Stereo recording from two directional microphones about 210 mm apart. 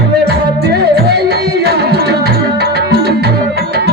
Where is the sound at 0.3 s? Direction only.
50° right (ahead or behind).